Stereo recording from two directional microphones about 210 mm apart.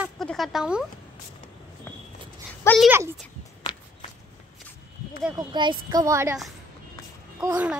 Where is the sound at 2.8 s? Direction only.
10° right (ahead or behind).